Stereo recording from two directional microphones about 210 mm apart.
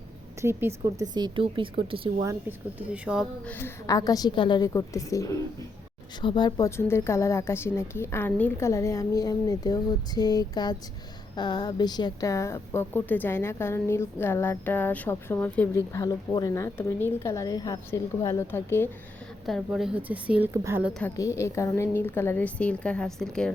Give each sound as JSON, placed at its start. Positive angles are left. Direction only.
{"t": 0.4, "sound": "a woman's voice", "side_deg": -10}
{"t": 2.2, "sound": "a woman's voice", "side_deg": -10}
{"t": 3.4, "sound": "a woman's voice", "side_deg": 10}
{"t": 10.2, "sound": "a sound", "side_deg": 20}
{"t": 11.3, "sound": "a woman's voice", "side_deg": 20}
{"t": 19.5, "sound": "a woman's voice", "side_deg": 0}
{"t": 21.0, "sound": "a woman's voice", "side_deg": 15}